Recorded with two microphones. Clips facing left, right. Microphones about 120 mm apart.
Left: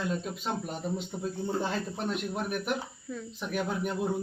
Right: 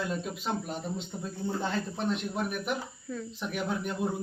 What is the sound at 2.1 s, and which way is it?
Speech, centre (ahead or behind).